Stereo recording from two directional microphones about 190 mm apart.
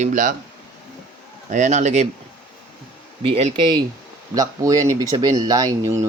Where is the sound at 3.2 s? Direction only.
30° right (ahead or behind).